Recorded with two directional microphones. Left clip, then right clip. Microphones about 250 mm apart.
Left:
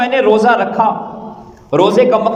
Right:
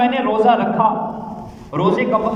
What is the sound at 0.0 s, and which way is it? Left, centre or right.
A man's voice, left.